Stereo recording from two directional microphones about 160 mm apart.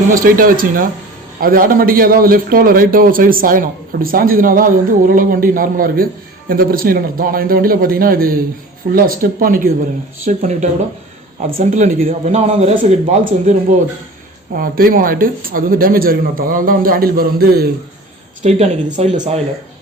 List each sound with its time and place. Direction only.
0.1 s a man's voice: 60° right (ahead or behind)
10.2 s speech: 50° right (ahead or behind)
12.8 s speech: 50° right (ahead or behind)
14.6 s a man's voice: 65° right (ahead or behind)
18.4 s speech: 45° right (ahead or behind)